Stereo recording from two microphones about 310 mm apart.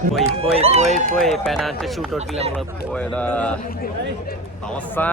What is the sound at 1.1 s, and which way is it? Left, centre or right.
Speech, centre.